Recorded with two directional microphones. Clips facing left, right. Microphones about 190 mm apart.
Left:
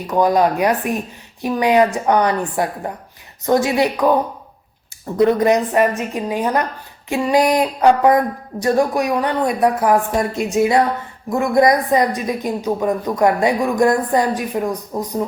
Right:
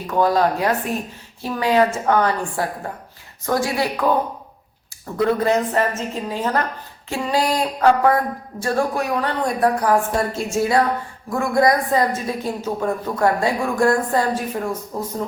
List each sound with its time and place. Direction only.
0.1 s a woman's voice: 15° left (ahead or behind)